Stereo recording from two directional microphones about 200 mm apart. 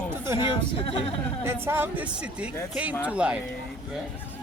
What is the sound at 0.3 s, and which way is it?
Speech, 25° left (ahead or behind).